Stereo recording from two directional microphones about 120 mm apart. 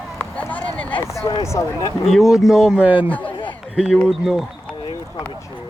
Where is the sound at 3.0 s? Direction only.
10° left (ahead or behind).